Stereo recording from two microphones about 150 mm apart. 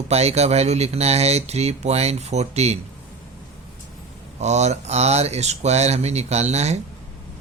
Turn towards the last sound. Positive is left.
turn(degrees=-50)  # may be behind; listen again after turning